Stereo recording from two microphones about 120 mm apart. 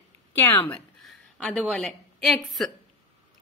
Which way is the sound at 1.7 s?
5° left (ahead or behind).